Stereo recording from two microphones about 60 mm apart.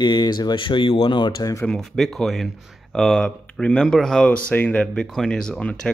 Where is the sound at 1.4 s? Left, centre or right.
Left.